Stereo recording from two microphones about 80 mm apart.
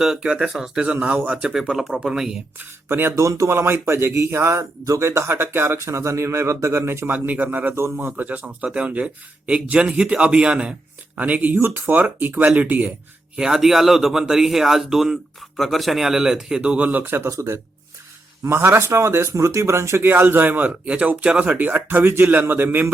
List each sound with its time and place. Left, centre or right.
0.0 s a man's voice: centre
2.6 s speech: right
3.2 s speech: right
7.1 s speech: right
8.1 s a man's voice: right
13.3 s speech: centre; by 22.9 s right